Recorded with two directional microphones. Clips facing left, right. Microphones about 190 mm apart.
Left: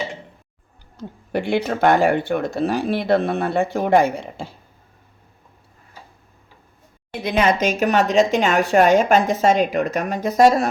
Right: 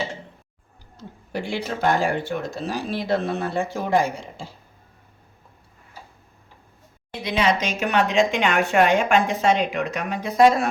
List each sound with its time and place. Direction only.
1.3 s speech: 60° left (ahead or behind)
7.2 s a woman's voice: 50° left (ahead or behind)